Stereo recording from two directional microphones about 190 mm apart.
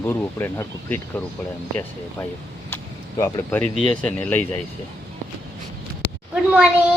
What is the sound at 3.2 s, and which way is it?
Speech, 15° left (ahead or behind).